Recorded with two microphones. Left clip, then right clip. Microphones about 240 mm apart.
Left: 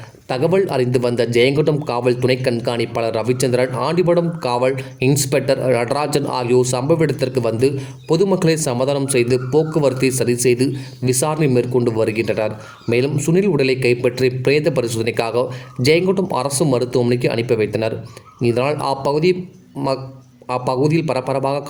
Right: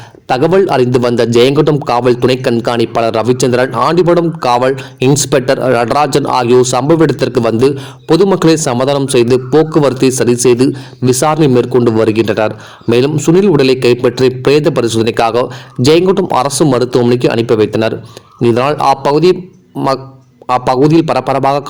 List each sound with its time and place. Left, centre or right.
0.3 s a man's voice: centre
20.5 s a man's voice: centre